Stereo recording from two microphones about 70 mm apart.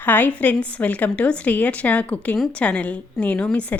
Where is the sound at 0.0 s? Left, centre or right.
Left.